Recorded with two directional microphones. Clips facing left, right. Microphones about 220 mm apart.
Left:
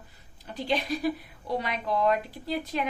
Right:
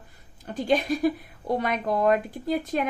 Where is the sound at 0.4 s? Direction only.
50° right (ahead or behind).